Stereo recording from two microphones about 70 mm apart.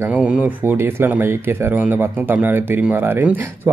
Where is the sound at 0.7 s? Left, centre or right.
Right.